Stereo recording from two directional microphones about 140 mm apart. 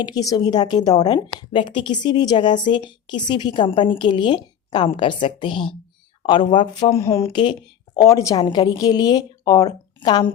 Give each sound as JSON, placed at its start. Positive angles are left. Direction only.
{"t": 0.0, "sound": "a woman's voice", "side_deg": 25}
{"t": 6.9, "sound": "a woman's voice", "side_deg": 20}